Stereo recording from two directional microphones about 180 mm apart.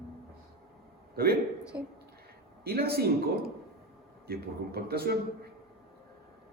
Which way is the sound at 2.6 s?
60° right (ahead or behind).